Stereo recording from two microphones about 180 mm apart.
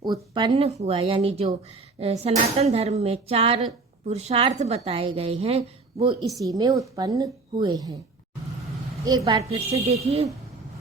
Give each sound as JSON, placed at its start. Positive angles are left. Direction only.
{"t": 0.0, "sound": "a woman's voice", "side_deg": -25}
{"t": 6.4, "sound": "a woman's voice", "side_deg": -20}
{"t": 9.0, "sound": "a woman's voice", "side_deg": -20}
{"t": 9.5, "sound": "a woman's voice", "side_deg": -35}